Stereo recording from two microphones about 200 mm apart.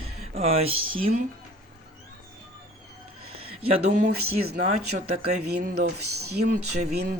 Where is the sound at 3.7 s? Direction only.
40° right (ahead or behind).